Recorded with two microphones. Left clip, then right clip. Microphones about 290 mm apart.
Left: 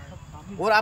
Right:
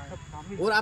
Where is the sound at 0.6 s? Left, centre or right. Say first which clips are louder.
Left 4 dB; centre.